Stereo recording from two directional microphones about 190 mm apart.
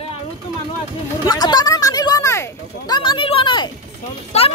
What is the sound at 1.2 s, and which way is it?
Speech, 20° left (ahead or behind).